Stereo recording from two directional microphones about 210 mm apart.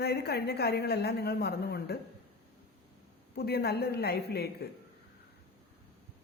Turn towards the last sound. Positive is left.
turn(degrees=50)  # may be behind; listen again after turning